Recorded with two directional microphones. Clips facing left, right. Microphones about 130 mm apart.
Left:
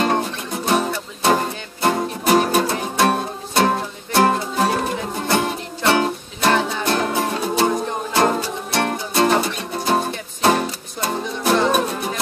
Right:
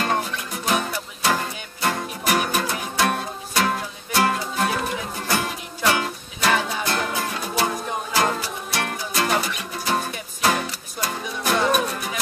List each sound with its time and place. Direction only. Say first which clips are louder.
0.7 s music: left 4 dB; 30° left (ahead or behind)